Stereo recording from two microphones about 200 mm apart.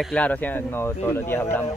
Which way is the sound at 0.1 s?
5° left (ahead or behind).